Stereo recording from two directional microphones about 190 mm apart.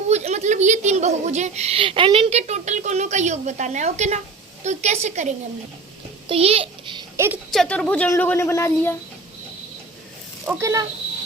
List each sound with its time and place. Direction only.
0.1 s a woman's voice: 35° right (ahead or behind)
7.5 s a woman's voice: 5° left (ahead or behind)
10.4 s speech: 10° right (ahead or behind)